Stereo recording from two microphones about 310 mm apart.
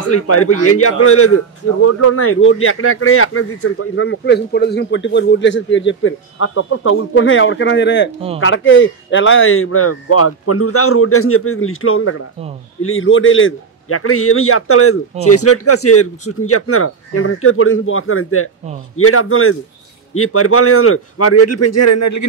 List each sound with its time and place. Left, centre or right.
0.1 s a man's voice: left